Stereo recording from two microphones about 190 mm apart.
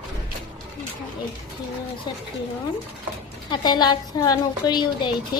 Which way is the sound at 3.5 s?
20° left (ahead or behind).